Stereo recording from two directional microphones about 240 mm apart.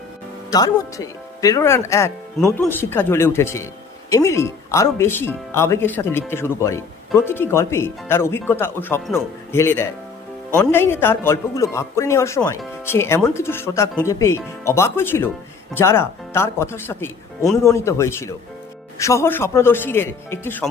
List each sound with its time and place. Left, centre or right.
0.5 s a man's voice: centre